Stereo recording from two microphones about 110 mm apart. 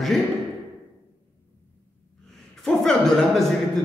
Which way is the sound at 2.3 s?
5° left (ahead or behind).